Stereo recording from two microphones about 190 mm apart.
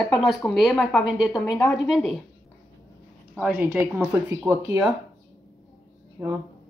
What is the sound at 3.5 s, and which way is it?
Speech, 10° right (ahead or behind).